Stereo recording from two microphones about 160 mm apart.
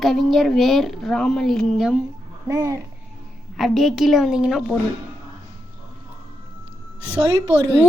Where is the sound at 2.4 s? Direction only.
20° right (ahead or behind).